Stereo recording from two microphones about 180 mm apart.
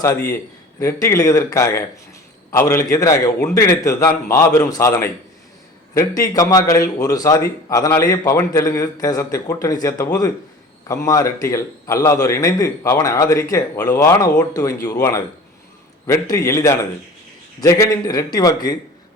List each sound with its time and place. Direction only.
0.0 s a man's voice: 10° left (ahead or behind)
16.3 s a man's voice: 15° left (ahead or behind)